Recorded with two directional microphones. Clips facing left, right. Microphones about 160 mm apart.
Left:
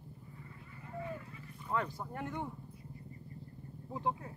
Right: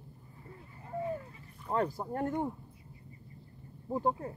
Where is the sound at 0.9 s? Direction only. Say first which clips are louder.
Right 6 dB; 30° right (ahead or behind).